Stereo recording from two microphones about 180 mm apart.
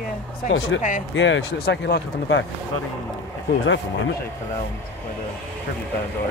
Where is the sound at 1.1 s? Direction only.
85° left.